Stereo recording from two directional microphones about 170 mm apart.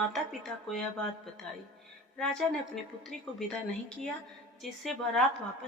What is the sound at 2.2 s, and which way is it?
Speech, 5° left (ahead or behind).